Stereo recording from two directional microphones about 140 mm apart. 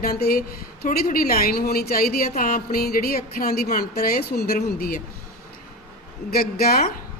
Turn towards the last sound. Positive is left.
turn(degrees=90)